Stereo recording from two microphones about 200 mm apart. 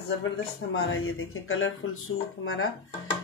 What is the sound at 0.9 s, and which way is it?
Speech, 90° left.